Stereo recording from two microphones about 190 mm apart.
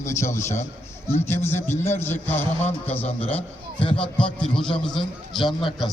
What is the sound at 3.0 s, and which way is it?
Speech, 30° left (ahead or behind).